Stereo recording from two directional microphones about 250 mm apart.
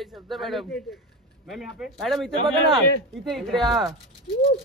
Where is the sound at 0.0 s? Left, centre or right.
Centre.